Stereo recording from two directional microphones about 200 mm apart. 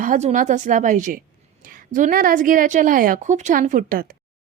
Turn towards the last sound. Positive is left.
turn(degrees=-45)  # may be behind; listen again after turning